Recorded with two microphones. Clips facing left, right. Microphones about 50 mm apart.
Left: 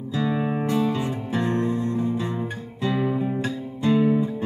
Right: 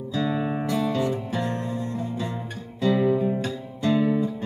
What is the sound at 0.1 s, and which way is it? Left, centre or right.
Music, left.